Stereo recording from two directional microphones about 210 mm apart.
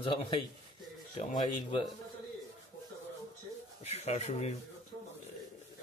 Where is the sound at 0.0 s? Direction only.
20° left (ahead or behind).